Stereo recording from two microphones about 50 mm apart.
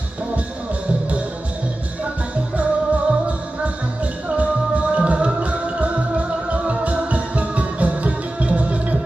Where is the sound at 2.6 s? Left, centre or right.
Right.